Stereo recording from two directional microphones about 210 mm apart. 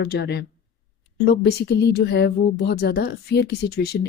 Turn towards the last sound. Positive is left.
turn(degrees=50)  # may be behind; listen again after turning